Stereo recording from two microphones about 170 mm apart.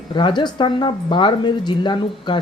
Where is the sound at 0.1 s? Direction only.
25° left (ahead or behind).